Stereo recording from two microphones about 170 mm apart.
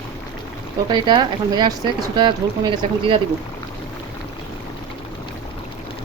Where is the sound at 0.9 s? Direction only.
25° right (ahead or behind).